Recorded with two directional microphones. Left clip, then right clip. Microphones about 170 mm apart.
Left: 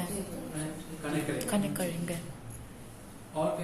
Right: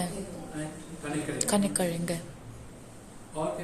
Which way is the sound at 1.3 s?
25° right (ahead or behind).